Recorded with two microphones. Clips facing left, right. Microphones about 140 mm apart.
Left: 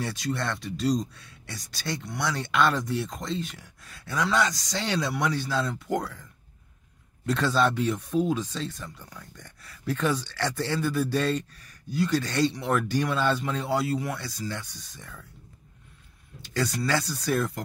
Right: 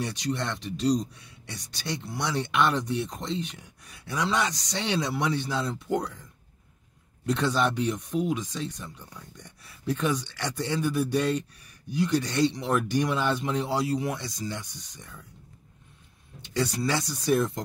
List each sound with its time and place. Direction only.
0.0 s speech: 20° right (ahead or behind)
7.2 s speech: 20° right (ahead or behind)
16.3 s speech: 20° right (ahead or behind)